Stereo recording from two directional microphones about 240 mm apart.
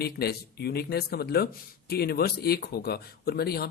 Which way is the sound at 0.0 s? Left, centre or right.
Left.